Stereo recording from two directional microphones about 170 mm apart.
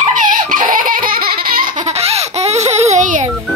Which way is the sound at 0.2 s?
50° right (ahead or behind).